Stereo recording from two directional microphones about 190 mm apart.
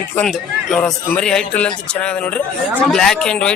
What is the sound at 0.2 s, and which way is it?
Speech, 5° left (ahead or behind).